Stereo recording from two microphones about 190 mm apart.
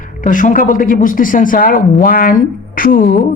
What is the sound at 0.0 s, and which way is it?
Speech, 45° left (ahead or behind).